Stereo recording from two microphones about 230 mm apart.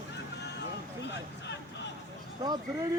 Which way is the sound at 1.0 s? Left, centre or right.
Left.